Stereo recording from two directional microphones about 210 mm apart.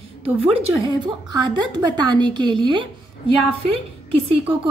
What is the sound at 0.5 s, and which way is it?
A woman's voice, 25° right (ahead or behind).